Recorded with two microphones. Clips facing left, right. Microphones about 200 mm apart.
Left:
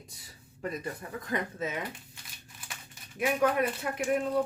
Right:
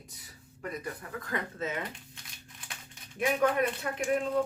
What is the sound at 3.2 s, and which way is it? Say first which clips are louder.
Speech: even; 5° left (ahead or behind).